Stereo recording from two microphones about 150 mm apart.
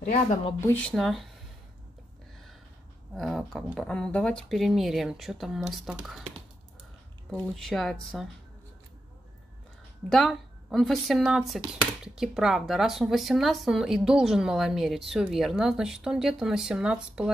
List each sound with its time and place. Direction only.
0.0 s speech: 55° left (ahead or behind)
0.6 s speech: 15° left (ahead or behind)
3.2 s speech: centre (ahead or behind)
7.3 s speech: centre (ahead or behind)
10.0 s speech: centre (ahead or behind)